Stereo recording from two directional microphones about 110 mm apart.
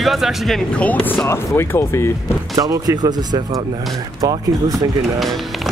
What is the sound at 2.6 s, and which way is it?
Speech, 35° right (ahead or behind).